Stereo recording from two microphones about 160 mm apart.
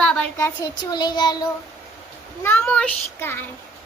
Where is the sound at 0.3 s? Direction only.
20° left (ahead or behind).